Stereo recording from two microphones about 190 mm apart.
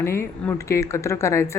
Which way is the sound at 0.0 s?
15° left (ahead or behind).